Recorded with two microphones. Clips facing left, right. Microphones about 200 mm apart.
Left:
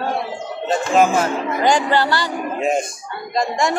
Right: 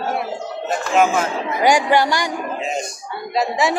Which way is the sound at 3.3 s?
5° right (ahead or behind).